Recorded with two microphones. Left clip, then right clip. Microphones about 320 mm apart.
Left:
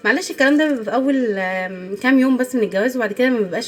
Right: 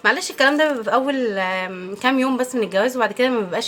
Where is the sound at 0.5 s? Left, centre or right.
Centre.